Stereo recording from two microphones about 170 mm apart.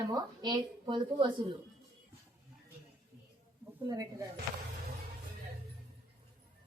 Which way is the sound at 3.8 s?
20° right (ahead or behind).